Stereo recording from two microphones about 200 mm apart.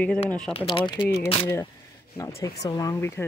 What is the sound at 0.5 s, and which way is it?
Speech, 30° left (ahead or behind).